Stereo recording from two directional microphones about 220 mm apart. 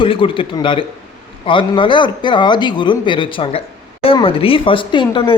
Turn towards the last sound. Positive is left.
turn(degrees=20)  # may be behind; listen again after turning